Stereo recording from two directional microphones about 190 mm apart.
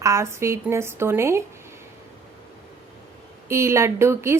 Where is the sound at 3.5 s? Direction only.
15° right (ahead or behind).